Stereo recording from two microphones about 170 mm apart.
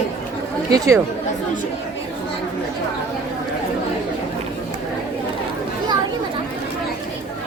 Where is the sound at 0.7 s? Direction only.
20° right (ahead or behind).